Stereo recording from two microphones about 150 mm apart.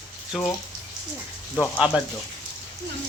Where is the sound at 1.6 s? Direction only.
5° right (ahead or behind).